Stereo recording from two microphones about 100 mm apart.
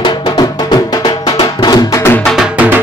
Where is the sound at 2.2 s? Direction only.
5° right (ahead or behind).